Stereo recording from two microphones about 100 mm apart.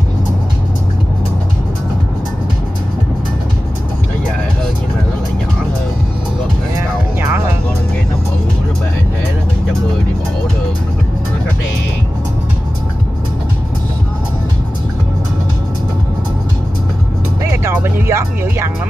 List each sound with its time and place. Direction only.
17.7 s music: 20° right (ahead or behind)